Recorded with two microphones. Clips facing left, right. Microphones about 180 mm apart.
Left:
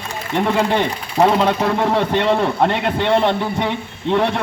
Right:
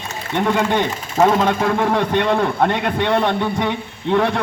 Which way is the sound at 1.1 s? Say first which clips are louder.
Even; 25° left (ahead or behind).